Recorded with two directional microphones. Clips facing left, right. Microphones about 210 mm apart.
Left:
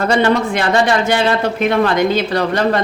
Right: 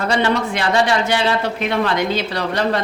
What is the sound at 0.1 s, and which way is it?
A man's voice, 50° left (ahead or behind).